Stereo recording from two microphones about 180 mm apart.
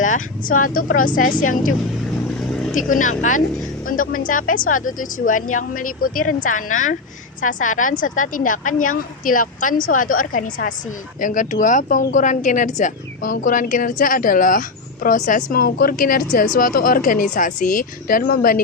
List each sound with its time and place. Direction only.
0.0 s speech: 45° left (ahead or behind)
2.7 s speech: 45° left (ahead or behind)